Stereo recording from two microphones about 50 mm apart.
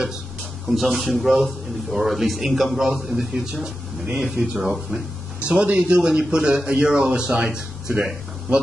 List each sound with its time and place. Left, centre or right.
0.4 s a man's voice: centre
5.4 s a man's voice: right